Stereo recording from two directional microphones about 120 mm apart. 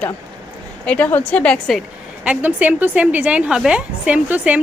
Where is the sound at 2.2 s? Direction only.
10° right (ahead or behind).